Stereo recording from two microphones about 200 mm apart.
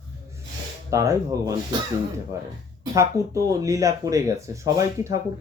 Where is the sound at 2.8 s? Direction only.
15° right (ahead or behind).